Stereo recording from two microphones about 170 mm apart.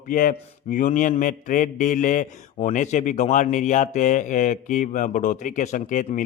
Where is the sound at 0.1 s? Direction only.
55° left (ahead or behind).